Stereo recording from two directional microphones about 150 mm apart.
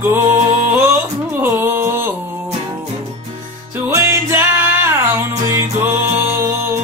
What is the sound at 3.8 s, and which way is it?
Music, 15° right (ahead or behind).